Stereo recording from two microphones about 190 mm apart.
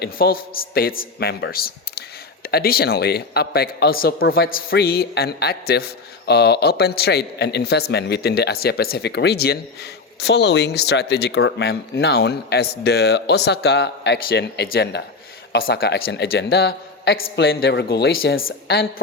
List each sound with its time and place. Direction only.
0.0 s a man's voice: 50° left (ahead or behind); by 17.4 s 75° left (ahead or behind)
17.4 s a man's voice: 55° left (ahead or behind)
18.3 s speech: 90° left